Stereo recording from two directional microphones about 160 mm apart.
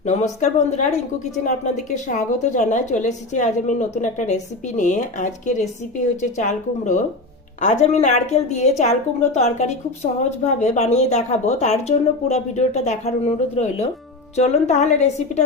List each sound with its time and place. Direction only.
0.3 s a woman's voice: 50° left (ahead or behind)